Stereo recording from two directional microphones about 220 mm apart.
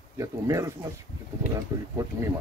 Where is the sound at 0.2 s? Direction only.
15° right (ahead or behind).